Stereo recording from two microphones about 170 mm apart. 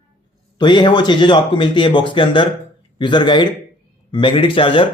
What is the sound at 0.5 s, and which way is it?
Speech, 25° left (ahead or behind).